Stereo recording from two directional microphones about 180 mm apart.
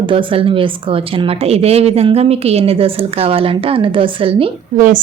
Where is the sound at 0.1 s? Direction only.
30° right (ahead or behind).